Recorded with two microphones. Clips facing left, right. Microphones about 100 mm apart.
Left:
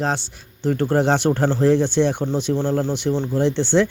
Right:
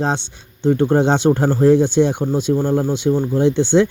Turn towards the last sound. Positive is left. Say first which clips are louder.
# right 4 dB
turn(degrees=-15)  # may be behind; listen again after turning